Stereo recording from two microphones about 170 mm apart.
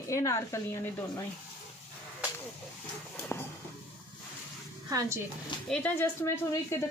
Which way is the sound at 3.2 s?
15° left (ahead or behind).